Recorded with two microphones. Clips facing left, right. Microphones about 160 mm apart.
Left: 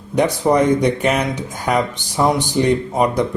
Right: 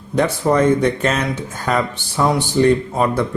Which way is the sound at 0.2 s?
15° left (ahead or behind).